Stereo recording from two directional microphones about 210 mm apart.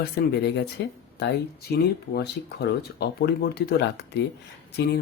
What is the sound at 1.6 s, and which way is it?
Speech, 50° left (ahead or behind).